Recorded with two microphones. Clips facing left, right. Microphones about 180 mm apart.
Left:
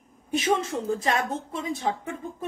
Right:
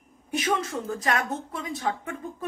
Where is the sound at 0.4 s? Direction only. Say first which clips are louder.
Left 2 dB; 25° left (ahead or behind).